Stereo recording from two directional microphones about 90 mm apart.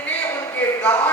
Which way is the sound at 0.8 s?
15° left (ahead or behind).